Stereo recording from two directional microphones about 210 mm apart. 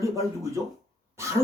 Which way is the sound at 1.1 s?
15° right (ahead or behind).